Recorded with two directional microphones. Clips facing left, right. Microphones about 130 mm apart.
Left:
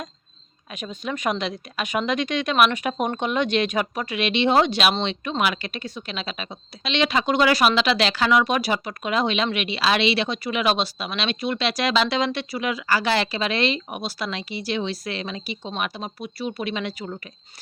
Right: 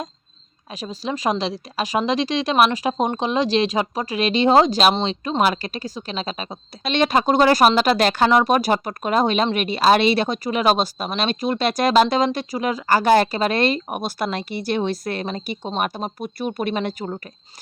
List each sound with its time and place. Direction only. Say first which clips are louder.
0.7 s a woman's voice: right 3 dB; 35° right (ahead or behind)